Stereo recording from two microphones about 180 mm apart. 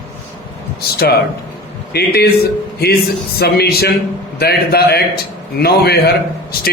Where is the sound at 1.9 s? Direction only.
60° left (ahead or behind).